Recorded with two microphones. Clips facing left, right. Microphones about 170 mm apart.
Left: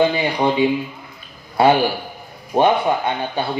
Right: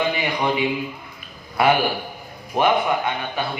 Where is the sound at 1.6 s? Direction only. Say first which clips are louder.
Left 4 dB; 30° left (ahead or behind).